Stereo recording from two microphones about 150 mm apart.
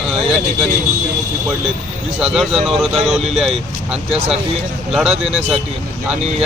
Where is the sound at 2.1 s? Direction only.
5° right (ahead or behind).